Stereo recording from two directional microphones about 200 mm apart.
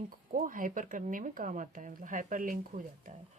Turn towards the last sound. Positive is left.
turn(degrees=-40)  # may be behind; listen again after turning